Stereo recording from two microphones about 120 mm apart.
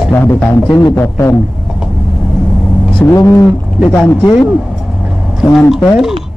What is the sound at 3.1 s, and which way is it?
Speech, 20° left (ahead or behind).